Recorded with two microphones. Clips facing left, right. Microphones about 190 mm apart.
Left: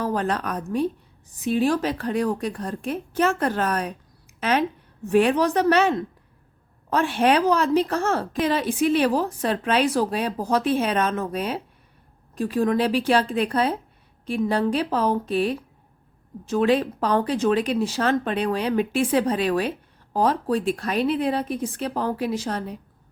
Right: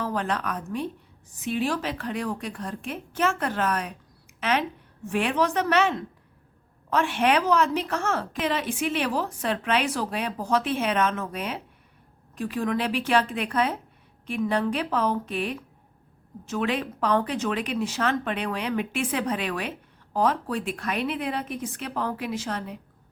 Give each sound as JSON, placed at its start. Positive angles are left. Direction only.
{"t": 0.0, "sound": "speech", "side_deg": 40}
{"t": 4.4, "sound": "a sound", "side_deg": 40}
{"t": 5.0, "sound": "speech", "side_deg": 40}